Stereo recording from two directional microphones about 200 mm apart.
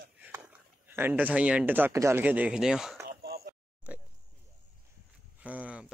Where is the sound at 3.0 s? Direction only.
50° right (ahead or behind).